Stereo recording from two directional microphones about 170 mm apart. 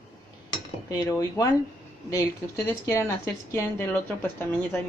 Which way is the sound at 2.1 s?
20° left (ahead or behind).